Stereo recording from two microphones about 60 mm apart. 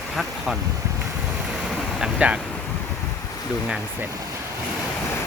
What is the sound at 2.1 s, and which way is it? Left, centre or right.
Speech, centre.